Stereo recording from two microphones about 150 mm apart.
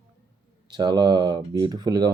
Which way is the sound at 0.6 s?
30° right (ahead or behind).